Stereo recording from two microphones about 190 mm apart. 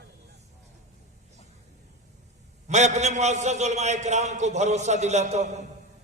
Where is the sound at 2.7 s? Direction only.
35° right (ahead or behind).